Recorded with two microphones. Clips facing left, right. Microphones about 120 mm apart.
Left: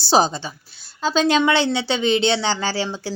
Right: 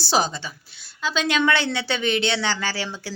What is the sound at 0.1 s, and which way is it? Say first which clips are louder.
A woman's voice: left 5 dB; 30° left (ahead or behind).